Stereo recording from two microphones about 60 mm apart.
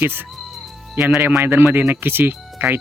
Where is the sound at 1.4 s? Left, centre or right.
Right.